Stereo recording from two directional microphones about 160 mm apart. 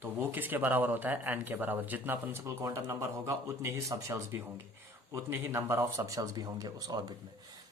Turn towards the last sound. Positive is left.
turn(degrees=-25)  # may be behind; listen again after turning